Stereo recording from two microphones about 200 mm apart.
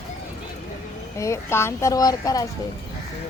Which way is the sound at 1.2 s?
15° left (ahead or behind).